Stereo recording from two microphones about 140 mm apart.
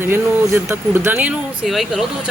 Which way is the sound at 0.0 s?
20° right (ahead or behind).